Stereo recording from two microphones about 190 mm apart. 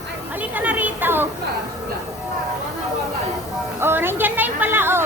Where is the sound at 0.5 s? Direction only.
10° right (ahead or behind).